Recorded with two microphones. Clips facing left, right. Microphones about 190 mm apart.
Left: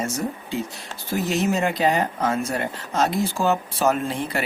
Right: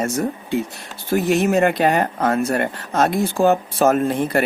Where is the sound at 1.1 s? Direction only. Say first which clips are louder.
Right 6 dB; 60° right (ahead or behind).